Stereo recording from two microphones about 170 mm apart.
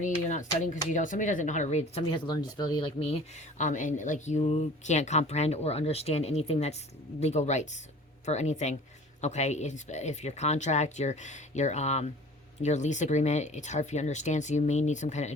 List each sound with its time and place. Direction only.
0.0 s speech: 45° left (ahead or behind)